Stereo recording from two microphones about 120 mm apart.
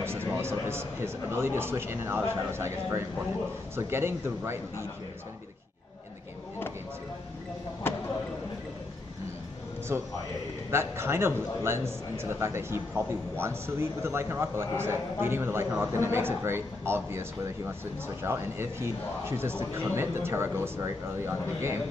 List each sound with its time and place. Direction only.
0.0 s a man's voice: 20° right (ahead or behind)
7.8 s basketball bounce: 20° left (ahead or behind)
9.9 s a man's voice: 20° right (ahead or behind)